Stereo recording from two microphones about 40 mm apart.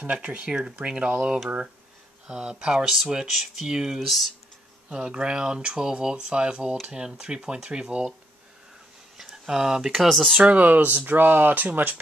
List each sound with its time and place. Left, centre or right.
0.0 s speech: right
4.0 s speech: centre
4.8 s speech: right
9.1 s a sound: centre
9.9 s speech: centre
10.5 s speech: right